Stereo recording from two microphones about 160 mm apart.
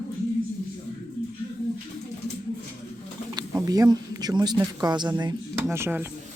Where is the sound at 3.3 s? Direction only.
20° right (ahead or behind).